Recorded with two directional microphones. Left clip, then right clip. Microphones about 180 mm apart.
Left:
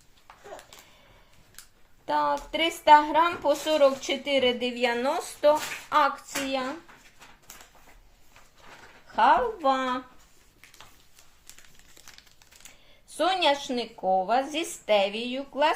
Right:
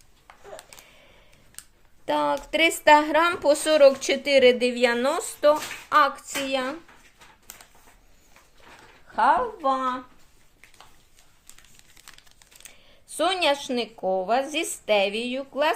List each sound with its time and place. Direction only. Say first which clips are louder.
2.0 s speech: right 2 dB; 45° right (ahead or behind); by 6.7 s 25° right (ahead or behind)
7.5 s a sound: right 2 dB; 40° right (ahead or behind)
9.1 s a woman's voice: even; 5° right (ahead or behind)
9.6 s speech: right 1 dB; 10° left (ahead or behind)
12.6 s speech: right 4 dB; 30° right (ahead or behind)